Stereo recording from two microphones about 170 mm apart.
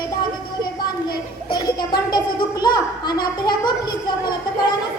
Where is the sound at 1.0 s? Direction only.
25° left (ahead or behind).